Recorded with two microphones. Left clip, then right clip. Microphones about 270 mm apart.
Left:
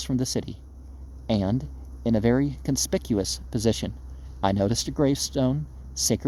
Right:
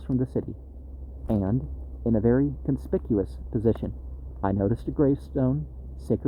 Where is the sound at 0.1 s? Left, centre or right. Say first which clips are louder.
Right 2 dB; left.